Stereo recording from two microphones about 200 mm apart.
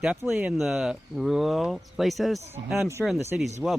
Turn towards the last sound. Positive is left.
turn(degrees=-5)  # may be behind; listen again after turning